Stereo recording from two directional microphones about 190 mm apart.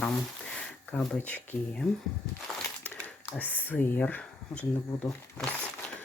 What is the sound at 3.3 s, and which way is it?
Speech, 10° left (ahead or behind).